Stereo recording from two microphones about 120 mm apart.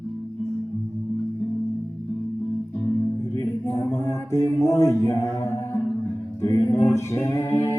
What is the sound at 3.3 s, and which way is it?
Mantra, 30° left (ahead or behind).